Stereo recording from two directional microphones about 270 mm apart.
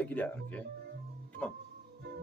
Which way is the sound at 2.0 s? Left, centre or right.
Right.